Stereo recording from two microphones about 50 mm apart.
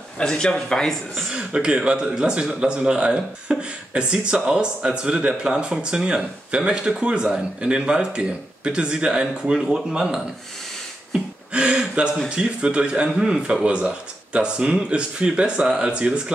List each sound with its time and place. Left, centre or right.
0.2 s speech: centre
1.3 s speech: centre
11.5 s speech: right